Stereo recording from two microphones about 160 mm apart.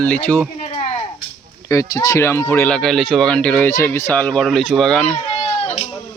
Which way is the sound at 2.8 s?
Centre (ahead or behind).